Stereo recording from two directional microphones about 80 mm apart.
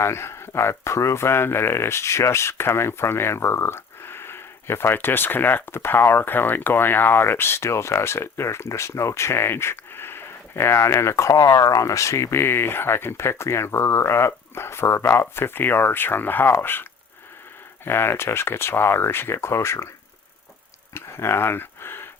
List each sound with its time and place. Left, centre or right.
0.0 s speech: left
17.8 s speech: left
20.9 s a sound: left